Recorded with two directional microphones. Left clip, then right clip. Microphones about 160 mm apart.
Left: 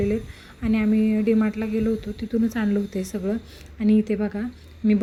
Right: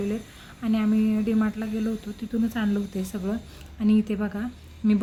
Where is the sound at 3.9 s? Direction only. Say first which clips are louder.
Left 3 dB; 10° left (ahead or behind).